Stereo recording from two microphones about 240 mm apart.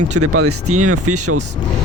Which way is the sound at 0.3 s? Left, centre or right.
Right.